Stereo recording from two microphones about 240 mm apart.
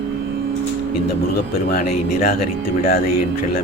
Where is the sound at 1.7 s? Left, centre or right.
Left.